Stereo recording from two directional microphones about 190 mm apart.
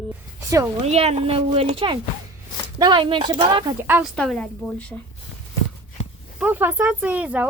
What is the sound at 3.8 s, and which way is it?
Speech, 10° right (ahead or behind).